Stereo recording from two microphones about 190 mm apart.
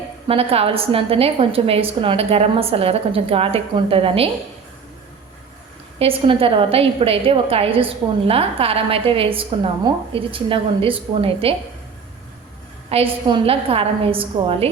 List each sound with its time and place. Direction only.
0.3 s a woman's voice: 30° right (ahead or behind)
6.0 s a woman's voice: 30° right (ahead or behind)
12.9 s a woman's voice: 30° right (ahead or behind)